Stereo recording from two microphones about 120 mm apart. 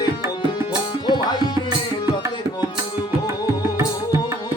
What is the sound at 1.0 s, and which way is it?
Tabla, 40° left (ahead or behind).